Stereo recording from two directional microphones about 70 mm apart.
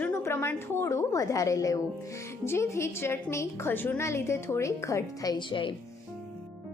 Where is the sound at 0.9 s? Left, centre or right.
Left.